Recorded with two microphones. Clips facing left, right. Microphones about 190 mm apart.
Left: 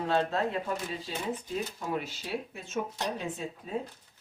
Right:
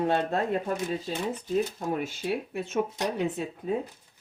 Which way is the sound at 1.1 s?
45° right (ahead or behind).